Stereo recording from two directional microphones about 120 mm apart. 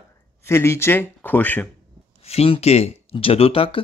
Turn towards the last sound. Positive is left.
turn(degrees=50)  # may be behind; listen again after turning